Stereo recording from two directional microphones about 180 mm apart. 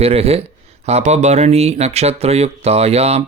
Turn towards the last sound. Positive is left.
turn(degrees=-35)  # may be behind; listen again after turning